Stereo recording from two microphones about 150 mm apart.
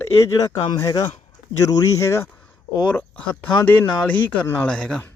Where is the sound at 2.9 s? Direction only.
10° left (ahead or behind).